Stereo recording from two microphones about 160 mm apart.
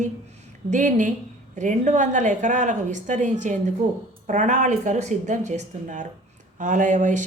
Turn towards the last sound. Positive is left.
turn(degrees=-50)  # may be behind; listen again after turning